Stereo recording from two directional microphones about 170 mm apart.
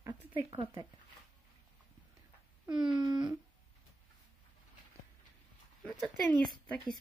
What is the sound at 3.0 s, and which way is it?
Speech, 25° right (ahead or behind).